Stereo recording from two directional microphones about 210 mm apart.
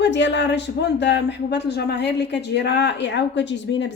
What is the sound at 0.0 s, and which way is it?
Speech, 55° left (ahead or behind).